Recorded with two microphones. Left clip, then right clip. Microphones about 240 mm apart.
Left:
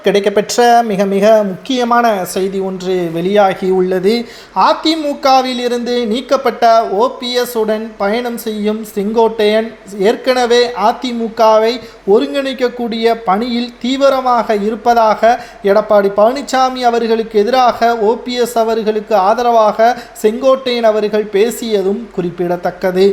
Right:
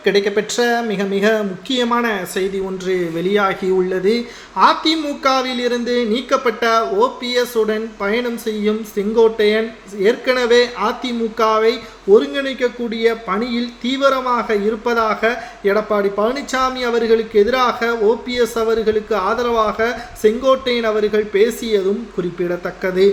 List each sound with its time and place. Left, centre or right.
0.0 s speech: centre